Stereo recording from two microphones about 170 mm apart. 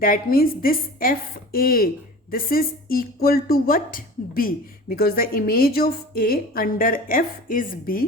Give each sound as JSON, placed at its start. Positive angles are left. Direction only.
{"t": 0.0, "sound": "speech", "side_deg": 60}